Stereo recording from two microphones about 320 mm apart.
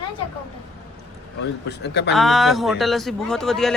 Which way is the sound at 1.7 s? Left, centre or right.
Left.